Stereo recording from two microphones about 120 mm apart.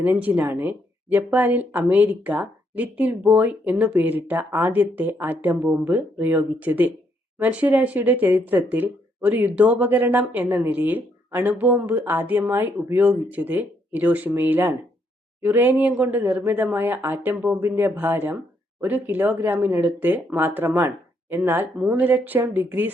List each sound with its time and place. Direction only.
0.0 s speech: 10° right (ahead or behind)